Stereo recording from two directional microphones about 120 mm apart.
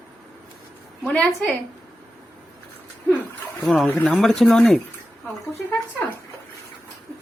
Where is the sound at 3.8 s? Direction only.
10° left (ahead or behind).